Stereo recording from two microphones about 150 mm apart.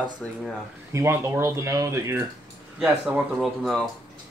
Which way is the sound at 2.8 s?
5° right (ahead or behind).